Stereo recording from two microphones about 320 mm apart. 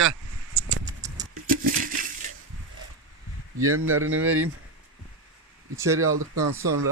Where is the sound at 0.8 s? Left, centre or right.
Centre.